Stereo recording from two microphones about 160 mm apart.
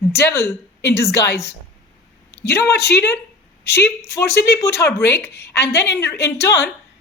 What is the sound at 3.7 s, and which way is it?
A woman's voice, 15° left (ahead or behind).